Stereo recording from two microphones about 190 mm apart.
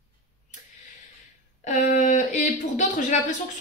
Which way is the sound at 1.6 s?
40° left (ahead or behind).